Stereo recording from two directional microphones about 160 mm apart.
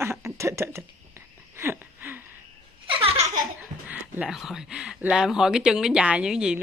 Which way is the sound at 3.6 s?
10° right (ahead or behind).